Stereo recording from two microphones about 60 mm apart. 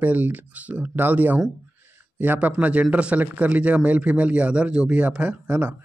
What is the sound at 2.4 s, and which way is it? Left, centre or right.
Speech, right.